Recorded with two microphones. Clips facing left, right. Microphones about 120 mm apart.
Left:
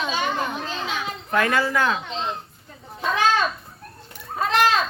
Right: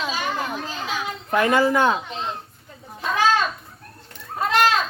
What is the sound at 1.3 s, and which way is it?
Speech, 20° right (ahead or behind).